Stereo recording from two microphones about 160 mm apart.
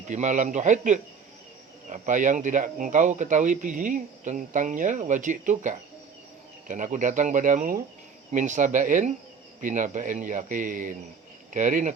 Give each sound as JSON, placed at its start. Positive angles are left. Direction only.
{"t": 0.1, "sound": "speech", "side_deg": -50}